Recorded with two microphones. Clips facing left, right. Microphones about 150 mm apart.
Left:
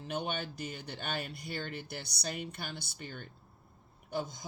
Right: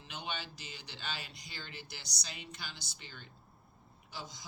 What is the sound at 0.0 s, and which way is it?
Speech, 50° left (ahead or behind).